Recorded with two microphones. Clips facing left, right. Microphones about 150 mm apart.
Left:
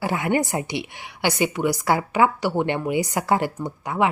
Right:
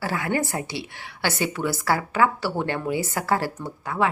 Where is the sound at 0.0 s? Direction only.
20° left (ahead or behind).